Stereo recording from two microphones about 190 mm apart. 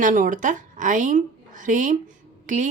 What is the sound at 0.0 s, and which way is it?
A woman's voice, 45° right (ahead or behind).